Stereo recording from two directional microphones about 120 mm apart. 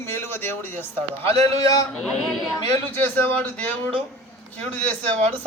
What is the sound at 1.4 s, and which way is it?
Speech, 30° left (ahead or behind).